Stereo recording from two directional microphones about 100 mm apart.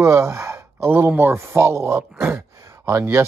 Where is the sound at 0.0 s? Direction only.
30° right (ahead or behind).